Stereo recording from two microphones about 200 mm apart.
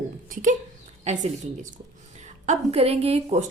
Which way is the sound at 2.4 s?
35° right (ahead or behind).